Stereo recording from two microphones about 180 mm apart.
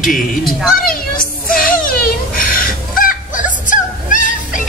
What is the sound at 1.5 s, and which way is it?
Fowl, 50° left (ahead or behind).